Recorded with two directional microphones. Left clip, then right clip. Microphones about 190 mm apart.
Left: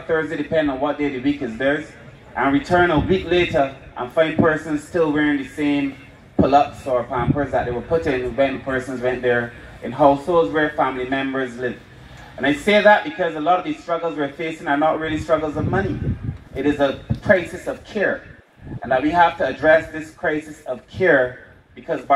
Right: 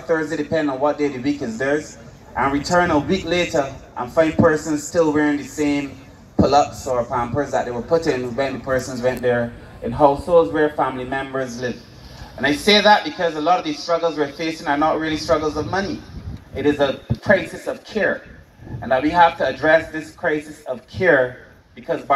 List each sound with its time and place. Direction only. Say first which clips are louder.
0.1 s a man's voice: even; 30° left (ahead or behind)
6.3 s a sound: even; 30° left (ahead or behind)
6.9 s a man's voice: even; 35° left (ahead or behind)